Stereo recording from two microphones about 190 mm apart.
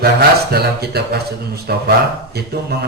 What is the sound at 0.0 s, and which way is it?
Speech, 55° right (ahead or behind).